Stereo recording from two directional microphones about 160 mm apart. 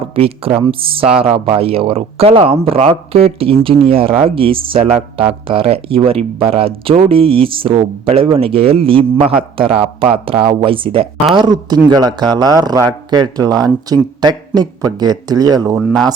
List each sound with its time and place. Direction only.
0.2 s speech: 35° right (ahead or behind)
10.4 s speech: 35° right (ahead or behind)